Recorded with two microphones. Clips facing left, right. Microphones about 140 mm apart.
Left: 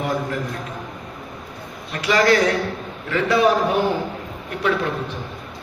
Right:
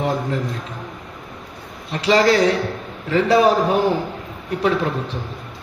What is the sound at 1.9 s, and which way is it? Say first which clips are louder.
A man's voice: right 2 dB; 30° right (ahead or behind).